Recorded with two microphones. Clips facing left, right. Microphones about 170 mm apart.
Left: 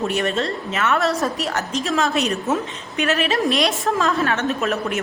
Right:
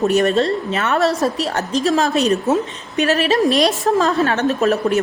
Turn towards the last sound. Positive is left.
turn(degrees=-35)  # may be behind; listen again after turning